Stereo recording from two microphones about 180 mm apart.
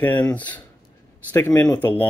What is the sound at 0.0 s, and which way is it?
Speech, 10° left (ahead or behind).